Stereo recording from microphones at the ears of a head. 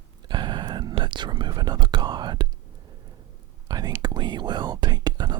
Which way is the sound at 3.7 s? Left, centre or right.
Right.